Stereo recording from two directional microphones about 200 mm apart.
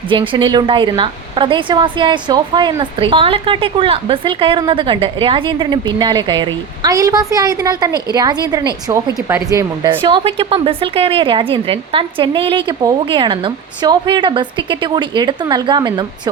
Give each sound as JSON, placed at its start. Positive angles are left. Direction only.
{"t": 0.1, "sound": "a woman's voice", "side_deg": -25}